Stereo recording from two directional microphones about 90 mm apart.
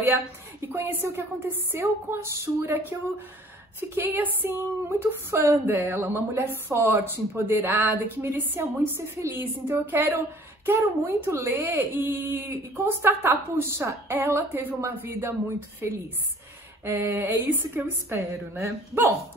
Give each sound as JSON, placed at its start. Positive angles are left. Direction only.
{"t": 0.0, "sound": "speech", "side_deg": -30}